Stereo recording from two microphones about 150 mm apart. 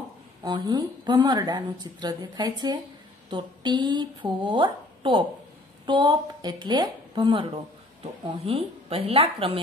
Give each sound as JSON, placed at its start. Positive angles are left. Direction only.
{"t": 0.4, "sound": "a woman's voice", "side_deg": -25}